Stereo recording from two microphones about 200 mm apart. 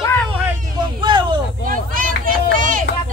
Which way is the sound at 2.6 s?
45° right (ahead or behind).